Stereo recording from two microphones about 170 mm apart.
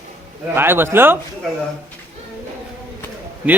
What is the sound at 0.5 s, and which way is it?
Speech, 15° right (ahead or behind).